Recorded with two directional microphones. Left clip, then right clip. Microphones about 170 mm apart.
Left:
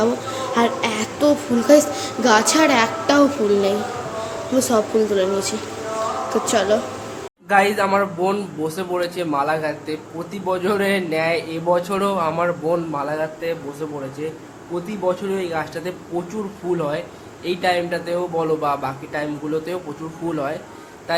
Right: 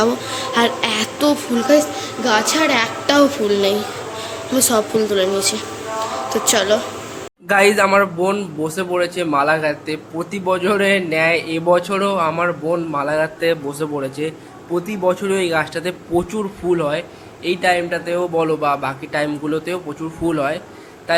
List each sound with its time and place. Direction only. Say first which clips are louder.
0.0 s a woman's voice: right 2 dB; centre (ahead or behind)
1.6 s a woman's voice: left 1 dB; 20° left (ahead or behind); by 6.7 s centre (ahead or behind)
7.4 s speech: right 3 dB; 25° right (ahead or behind)
8.2 s speech: right 2 dB; centre (ahead or behind)
8.6 s a man's voice: right 4 dB; 10° right (ahead or behind)
12.9 s a man's voice: right 5 dB; 15° right (ahead or behind)
14.8 s a man's voice: right 3 dB; 15° right (ahead or behind)